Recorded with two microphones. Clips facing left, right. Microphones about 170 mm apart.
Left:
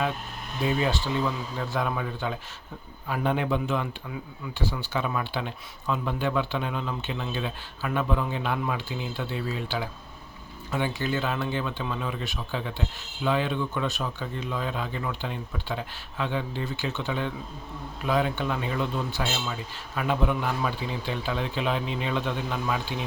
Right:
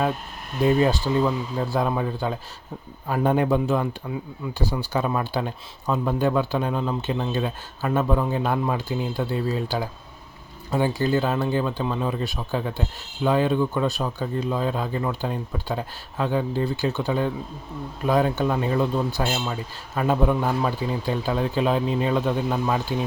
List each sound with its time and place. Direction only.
0.6 s speech: 45° right (ahead or behind)